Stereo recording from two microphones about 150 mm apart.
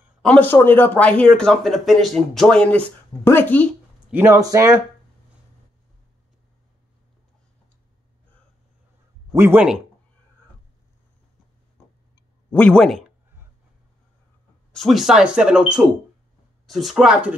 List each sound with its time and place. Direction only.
0.2 s speech: 10° left (ahead or behind)
4.1 s speech: 15° right (ahead or behind)
9.3 s speech: 15° right (ahead or behind)
12.4 s speech: 10° left (ahead or behind)
14.7 s speech: centre (ahead or behind)